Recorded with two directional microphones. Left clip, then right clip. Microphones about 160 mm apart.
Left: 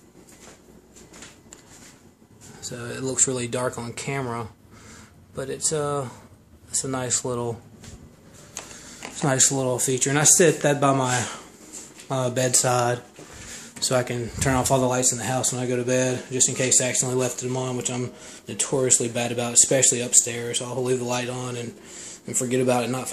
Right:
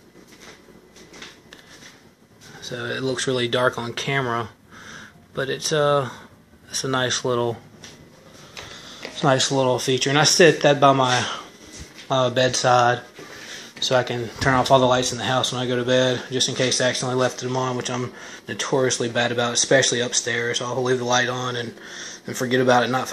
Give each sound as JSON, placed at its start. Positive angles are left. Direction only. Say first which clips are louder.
{"t": 2.6, "sound": "speech", "louder": "right 5 dB", "side_deg": 5}
{"t": 9.1, "sound": "speech", "louder": "right 4 dB", "side_deg": 10}
{"t": 14.7, "sound": "speech", "louder": "right 6 dB", "side_deg": 10}